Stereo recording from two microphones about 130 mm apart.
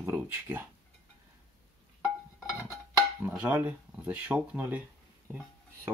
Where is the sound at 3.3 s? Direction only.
10° right (ahead or behind).